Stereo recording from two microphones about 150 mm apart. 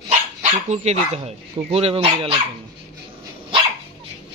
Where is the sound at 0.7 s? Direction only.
45° right (ahead or behind).